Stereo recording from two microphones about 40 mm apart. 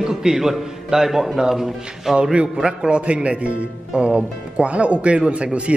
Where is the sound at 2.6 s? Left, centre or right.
Right.